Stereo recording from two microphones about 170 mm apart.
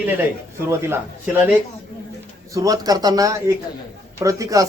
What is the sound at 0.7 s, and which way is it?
Speech, 15° right (ahead or behind).